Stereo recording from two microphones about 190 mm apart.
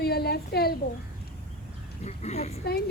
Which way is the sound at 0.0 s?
55° left (ahead or behind).